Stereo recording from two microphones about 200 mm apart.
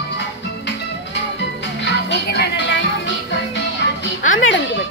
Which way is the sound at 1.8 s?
55° left (ahead or behind).